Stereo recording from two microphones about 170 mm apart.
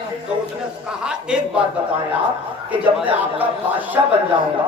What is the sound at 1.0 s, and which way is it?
Speech, 5° right (ahead or behind).